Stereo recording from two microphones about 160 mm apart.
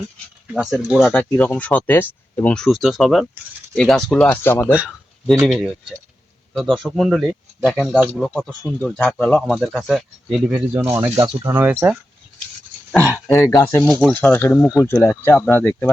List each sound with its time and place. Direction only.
0.5 s speech: 5° right (ahead or behind)
1.1 s speech: 10° left (ahead or behind)
5.5 s speech: centre (ahead or behind)
10.8 s speech: 15° right (ahead or behind)
12.9 s speech: 10° left (ahead or behind)
14.8 s speech: 15° left (ahead or behind)